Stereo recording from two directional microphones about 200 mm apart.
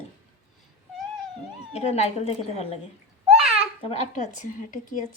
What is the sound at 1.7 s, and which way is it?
A woman's voice, 30° left (ahead or behind).